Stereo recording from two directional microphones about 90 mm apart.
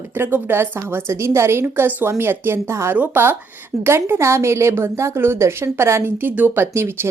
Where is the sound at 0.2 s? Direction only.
25° right (ahead or behind).